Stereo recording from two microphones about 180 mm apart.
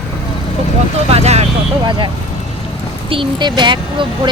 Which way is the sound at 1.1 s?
35° right (ahead or behind).